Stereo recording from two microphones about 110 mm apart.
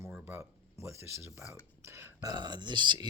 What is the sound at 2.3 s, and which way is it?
Speech, 40° right (ahead or behind).